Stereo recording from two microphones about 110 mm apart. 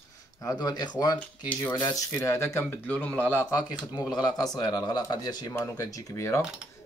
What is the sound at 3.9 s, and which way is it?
Speech, 35° left (ahead or behind).